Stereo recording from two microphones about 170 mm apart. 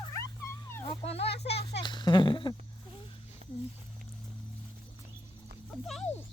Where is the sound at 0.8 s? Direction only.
35° left (ahead or behind).